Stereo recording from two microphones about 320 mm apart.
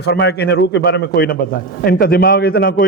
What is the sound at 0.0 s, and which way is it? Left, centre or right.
A man's voice, left.